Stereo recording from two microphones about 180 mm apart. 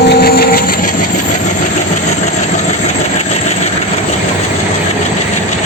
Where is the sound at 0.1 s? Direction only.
60° left (ahead or behind).